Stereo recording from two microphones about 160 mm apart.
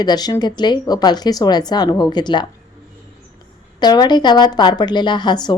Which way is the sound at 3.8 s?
25° left (ahead or behind).